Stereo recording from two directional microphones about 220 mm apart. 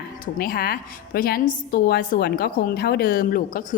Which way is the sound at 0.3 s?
45° left (ahead or behind).